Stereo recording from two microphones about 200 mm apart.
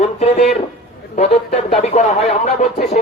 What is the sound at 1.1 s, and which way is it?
A man's voice, 35° left (ahead or behind).